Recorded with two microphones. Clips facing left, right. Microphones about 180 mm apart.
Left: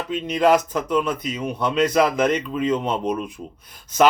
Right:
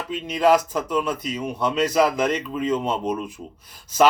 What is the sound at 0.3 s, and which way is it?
Speech, 10° right (ahead or behind).